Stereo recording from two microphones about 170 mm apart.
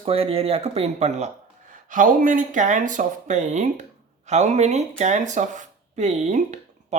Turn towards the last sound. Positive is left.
turn(degrees=-40)  # may be behind; listen again after turning